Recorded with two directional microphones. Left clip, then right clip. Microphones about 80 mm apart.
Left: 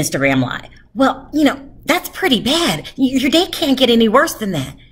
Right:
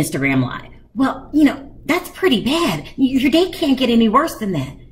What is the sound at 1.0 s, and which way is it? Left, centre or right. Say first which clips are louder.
A woman's voice: left 2 dB; left.